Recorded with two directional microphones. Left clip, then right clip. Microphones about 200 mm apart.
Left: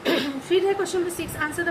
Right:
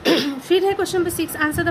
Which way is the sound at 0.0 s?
55° right (ahead or behind).